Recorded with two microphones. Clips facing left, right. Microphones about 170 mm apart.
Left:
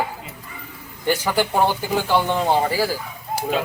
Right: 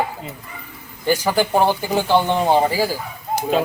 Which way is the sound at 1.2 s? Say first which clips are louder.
Right 3 dB; 15° right (ahead or behind).